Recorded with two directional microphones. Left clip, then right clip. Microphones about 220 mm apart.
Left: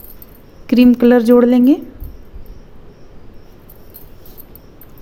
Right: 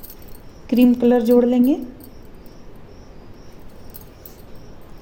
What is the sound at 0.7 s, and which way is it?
A woman's voice, 25° left (ahead or behind).